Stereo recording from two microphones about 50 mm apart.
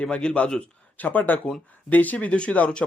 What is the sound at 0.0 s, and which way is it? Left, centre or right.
Speech, left.